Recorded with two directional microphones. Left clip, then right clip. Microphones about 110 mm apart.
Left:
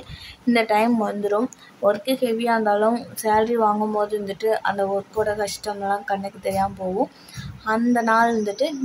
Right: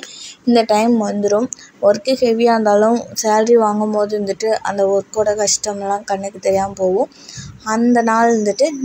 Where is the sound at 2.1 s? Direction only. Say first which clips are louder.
Right 8 dB; 35° right (ahead or behind).